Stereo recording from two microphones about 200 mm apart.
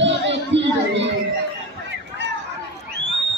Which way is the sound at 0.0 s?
65° right (ahead or behind).